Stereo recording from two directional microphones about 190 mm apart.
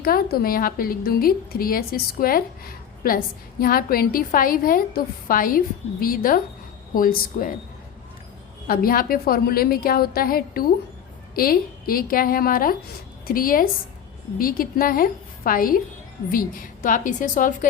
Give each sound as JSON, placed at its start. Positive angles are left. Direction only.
{"t": 0.0, "sound": "a woman's voice", "side_deg": 50}
{"t": 8.6, "sound": "a woman's voice", "side_deg": 50}